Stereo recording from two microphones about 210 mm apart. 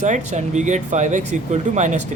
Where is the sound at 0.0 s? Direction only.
35° right (ahead or behind).